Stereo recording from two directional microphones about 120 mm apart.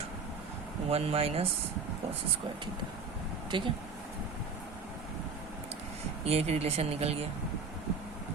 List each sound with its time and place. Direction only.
0.9 s a woman's voice: 60° right (ahead or behind)
3.5 s speech: 40° right (ahead or behind)
6.2 s a woman's voice: 60° right (ahead or behind)